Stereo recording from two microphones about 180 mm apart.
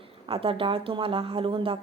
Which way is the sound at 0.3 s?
30° right (ahead or behind).